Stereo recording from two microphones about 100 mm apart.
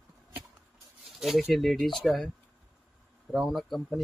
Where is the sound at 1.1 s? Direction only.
Centre (ahead or behind).